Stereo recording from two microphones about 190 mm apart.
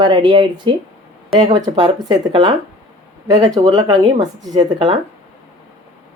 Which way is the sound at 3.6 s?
25° right (ahead or behind).